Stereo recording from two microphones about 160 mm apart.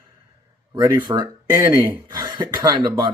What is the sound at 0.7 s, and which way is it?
Speech, 20° right (ahead or behind).